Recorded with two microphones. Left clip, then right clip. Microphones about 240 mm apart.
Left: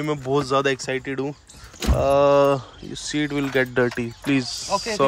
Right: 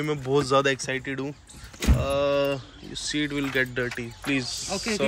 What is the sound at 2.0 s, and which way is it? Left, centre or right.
Speech, left.